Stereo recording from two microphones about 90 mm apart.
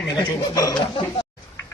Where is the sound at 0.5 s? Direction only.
40° left (ahead or behind).